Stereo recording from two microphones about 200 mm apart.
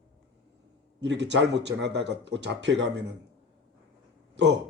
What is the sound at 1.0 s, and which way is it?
A man's voice, 60° right (ahead or behind).